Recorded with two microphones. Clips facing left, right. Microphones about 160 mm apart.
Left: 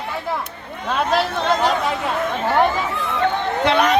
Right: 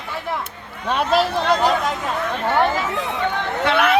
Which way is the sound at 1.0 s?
Centre (ahead or behind).